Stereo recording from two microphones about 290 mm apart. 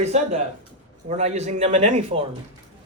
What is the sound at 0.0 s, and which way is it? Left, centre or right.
Speech, right.